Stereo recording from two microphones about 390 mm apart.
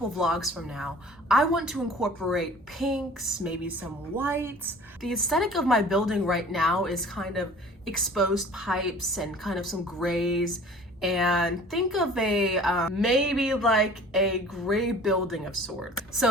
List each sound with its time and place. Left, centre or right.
0.2 s a woman's voice: centre